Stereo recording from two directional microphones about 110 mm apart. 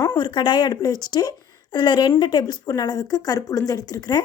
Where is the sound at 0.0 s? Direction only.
40° left (ahead or behind).